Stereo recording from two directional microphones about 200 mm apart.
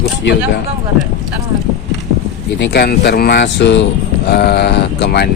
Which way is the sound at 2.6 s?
55° left (ahead or behind).